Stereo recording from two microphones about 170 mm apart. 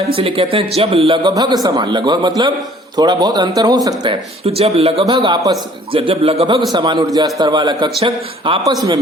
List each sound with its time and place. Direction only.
0.2 s a man's voice: 35° right (ahead or behind)
1.3 s a man's voice: 25° right (ahead or behind)